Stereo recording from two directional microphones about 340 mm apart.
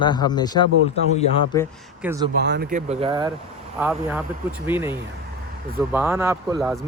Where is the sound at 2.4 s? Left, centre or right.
Right.